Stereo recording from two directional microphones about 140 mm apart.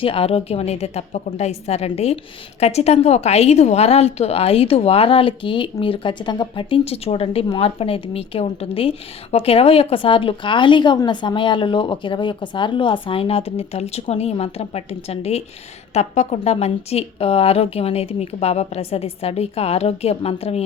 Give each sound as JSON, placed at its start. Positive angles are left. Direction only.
{"t": 0.0, "sound": "a woman's voice", "side_deg": 40}